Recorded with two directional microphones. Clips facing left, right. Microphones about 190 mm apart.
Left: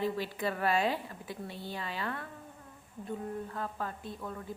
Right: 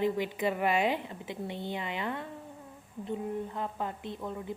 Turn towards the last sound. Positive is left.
turn(degrees=-20)  # may be behind; listen again after turning